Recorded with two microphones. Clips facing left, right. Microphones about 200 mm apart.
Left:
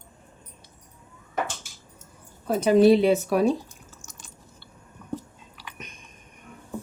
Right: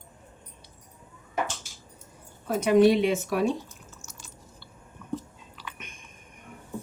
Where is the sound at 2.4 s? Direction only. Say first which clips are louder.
Left 2 dB; 35° left (ahead or behind).